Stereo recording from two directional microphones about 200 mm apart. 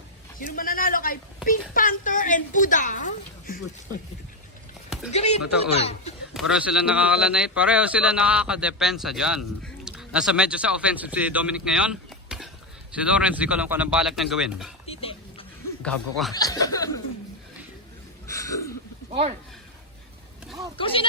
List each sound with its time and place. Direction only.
0.3 s a man's voice: 45° left (ahead or behind)
5.1 s a woman's voice: 30° left (ahead or behind)
6.3 s a man's voice: 5° right (ahead or behind)
14.8 s dog: 30° left (ahead or behind)
15.8 s a man's voice: 5° left (ahead or behind)
16.3 s speech: 20° left (ahead or behind)
18.3 s a sound: 15° left (ahead or behind)
20.7 s speech: 25° left (ahead or behind)